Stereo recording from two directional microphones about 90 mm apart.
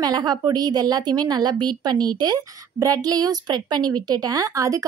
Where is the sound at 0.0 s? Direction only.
50° right (ahead or behind).